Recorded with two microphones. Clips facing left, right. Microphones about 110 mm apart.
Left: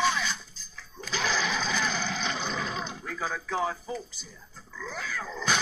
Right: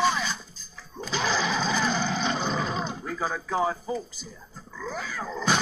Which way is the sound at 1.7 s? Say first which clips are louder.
Right 4 dB; 35° right (ahead or behind).